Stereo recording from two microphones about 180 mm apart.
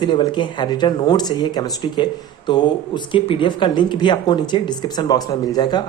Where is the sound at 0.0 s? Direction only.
25° left (ahead or behind).